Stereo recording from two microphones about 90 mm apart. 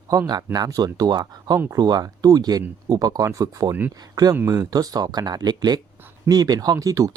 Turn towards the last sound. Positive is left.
turn(degrees=-35)  # may be behind; listen again after turning